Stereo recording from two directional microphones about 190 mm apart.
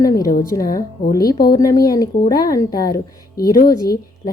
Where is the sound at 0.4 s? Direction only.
15° left (ahead or behind).